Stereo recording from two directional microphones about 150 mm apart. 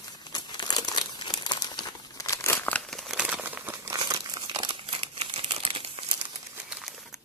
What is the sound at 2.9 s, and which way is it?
Crumpling, centre (ahead or behind).